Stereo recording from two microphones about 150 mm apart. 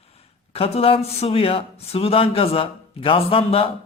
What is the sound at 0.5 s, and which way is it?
Speech, 40° left (ahead or behind).